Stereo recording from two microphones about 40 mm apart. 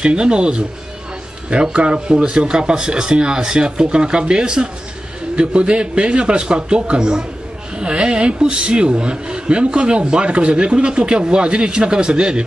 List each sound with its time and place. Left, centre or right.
0.0 s speech: right